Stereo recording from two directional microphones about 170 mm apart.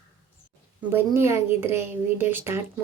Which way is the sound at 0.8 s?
15° right (ahead or behind).